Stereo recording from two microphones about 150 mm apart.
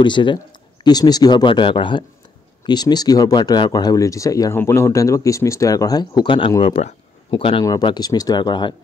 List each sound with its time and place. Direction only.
0.0 s speech: 30° left (ahead or behind)